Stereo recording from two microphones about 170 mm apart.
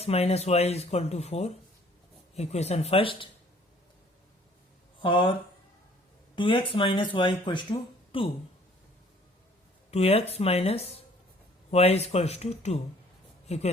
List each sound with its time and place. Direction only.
0.0 s speech: 35° left (ahead or behind)
4.9 s speech: 30° left (ahead or behind)
9.9 s speech: 35° left (ahead or behind)